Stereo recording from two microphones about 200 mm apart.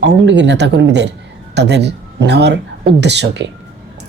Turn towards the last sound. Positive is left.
turn(degrees=-60)  # may be behind; listen again after turning